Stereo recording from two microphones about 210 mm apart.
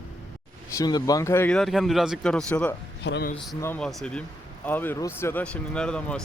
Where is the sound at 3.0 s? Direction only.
55° left (ahead or behind).